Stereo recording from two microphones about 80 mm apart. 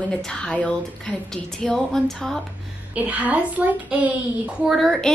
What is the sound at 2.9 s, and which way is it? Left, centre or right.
A child's voice, centre.